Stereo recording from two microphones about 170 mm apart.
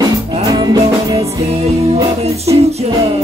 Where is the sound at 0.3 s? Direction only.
20° right (ahead or behind).